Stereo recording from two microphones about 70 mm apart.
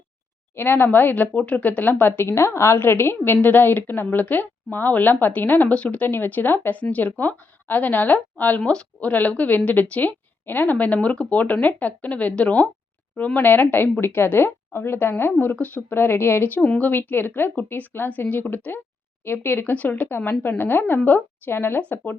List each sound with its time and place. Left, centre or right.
0.5 s a woman's voice: left
16.6 s a woman's voice: centre
16.9 s a woman's voice: left